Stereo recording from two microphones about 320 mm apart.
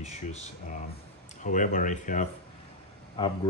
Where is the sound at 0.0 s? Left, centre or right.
Left.